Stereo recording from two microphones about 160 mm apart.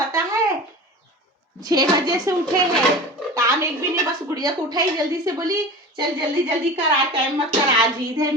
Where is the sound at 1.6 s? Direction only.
25° right (ahead or behind).